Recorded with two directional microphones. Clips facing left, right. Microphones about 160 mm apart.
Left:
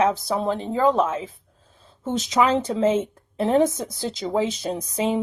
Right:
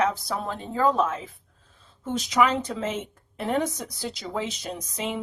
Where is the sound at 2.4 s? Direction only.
25° left (ahead or behind).